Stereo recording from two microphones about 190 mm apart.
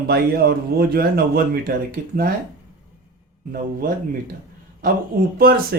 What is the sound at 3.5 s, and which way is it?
Speech, 50° right (ahead or behind).